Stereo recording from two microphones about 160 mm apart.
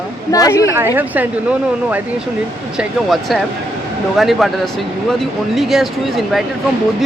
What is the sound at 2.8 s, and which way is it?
Speech, centre (ahead or behind).